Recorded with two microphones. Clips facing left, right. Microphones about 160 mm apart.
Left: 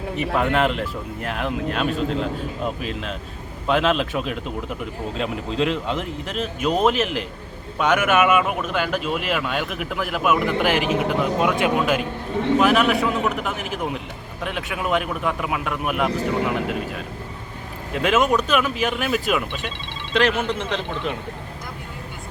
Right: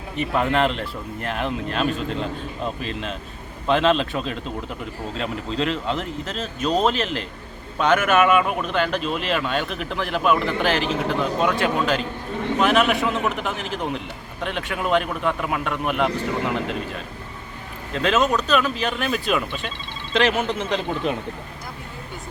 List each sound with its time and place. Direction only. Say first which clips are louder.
0.2 s speech: even; 5° left (ahead or behind)
17.9 s speech: left 1 dB; 10° left (ahead or behind)
20.1 s a man's voice: even; 5° right (ahead or behind)